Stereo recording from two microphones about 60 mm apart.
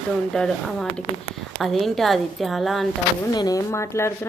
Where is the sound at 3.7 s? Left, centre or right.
Left.